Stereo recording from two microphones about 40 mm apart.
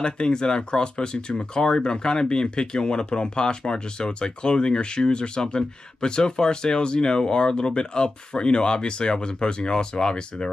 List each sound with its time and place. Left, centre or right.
0.0 s speech: left